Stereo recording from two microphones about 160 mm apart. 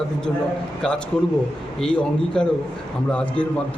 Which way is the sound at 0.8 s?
5° left (ahead or behind).